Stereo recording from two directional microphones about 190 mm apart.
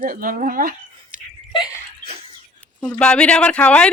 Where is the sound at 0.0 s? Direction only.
50° right (ahead or behind).